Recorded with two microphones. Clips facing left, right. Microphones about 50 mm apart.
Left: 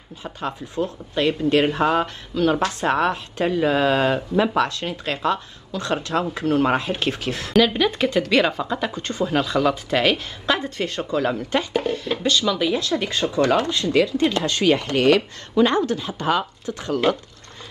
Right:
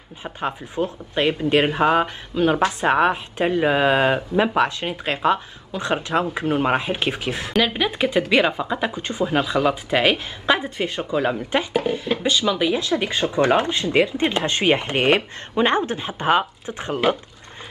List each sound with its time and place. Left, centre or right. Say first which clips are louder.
0.2 s speech: right 2 dB; right